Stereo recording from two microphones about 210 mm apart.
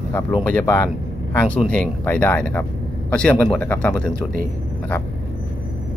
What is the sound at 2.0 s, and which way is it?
Speech, 10° left (ahead or behind).